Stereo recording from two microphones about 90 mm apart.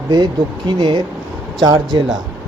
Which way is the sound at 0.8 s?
55° right (ahead or behind).